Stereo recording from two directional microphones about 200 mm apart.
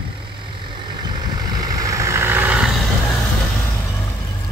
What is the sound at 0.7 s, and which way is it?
Vehicle, 25° right (ahead or behind).